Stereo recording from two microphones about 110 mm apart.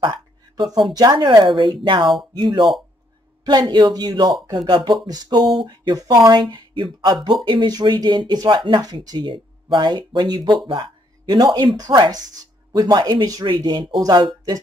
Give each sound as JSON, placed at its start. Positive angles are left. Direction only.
{"t": 0.0, "sound": "a woman's voice", "side_deg": -40}